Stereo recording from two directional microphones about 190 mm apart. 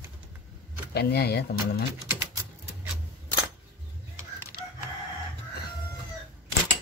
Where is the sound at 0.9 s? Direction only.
55° left (ahead or behind).